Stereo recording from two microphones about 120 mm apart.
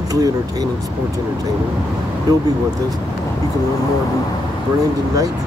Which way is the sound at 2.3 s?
30° right (ahead or behind).